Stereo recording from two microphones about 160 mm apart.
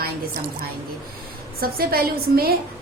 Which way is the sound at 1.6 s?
70° right (ahead or behind).